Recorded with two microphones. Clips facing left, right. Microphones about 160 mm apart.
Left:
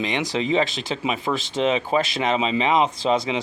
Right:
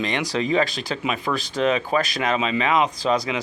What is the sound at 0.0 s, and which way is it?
Speech, 20° left (ahead or behind).